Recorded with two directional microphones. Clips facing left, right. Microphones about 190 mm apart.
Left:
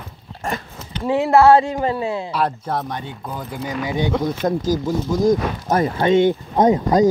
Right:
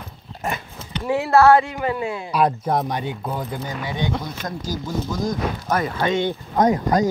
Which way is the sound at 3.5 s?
15° left (ahead or behind).